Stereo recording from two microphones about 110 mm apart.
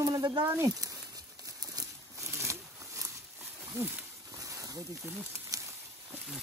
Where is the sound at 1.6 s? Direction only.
30° right (ahead or behind).